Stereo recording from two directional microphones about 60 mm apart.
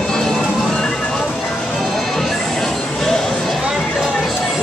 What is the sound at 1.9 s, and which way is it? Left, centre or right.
Music, centre.